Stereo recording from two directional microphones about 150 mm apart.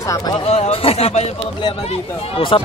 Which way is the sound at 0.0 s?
20° left (ahead or behind).